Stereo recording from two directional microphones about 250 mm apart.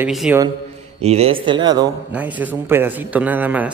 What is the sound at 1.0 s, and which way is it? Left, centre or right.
Speech, right.